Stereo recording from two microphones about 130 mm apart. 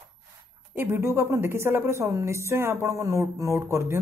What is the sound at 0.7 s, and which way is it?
A woman's voice, 20° right (ahead or behind).